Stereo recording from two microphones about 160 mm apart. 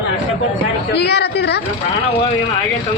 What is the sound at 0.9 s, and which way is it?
Speech, 90° left.